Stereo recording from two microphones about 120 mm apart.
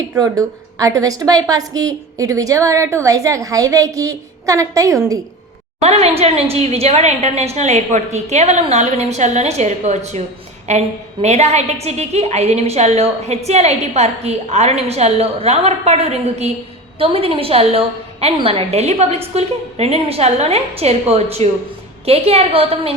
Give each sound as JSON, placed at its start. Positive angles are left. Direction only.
{"t": 0.2, "sound": "a woman's voice", "side_deg": -30}
{"t": 5.8, "sound": "a woman's voice", "side_deg": -60}
{"t": 17.0, "sound": "a woman's voice", "side_deg": -50}